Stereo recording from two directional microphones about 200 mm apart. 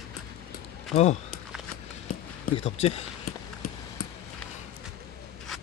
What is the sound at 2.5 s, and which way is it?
Speech, 30° left (ahead or behind).